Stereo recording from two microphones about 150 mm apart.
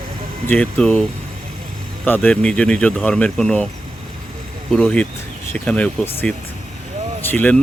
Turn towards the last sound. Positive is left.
turn(degrees=10)  # may be behind; listen again after turning